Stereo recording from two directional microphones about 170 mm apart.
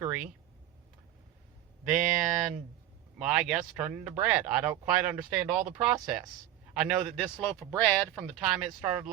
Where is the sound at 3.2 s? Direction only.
5° right (ahead or behind).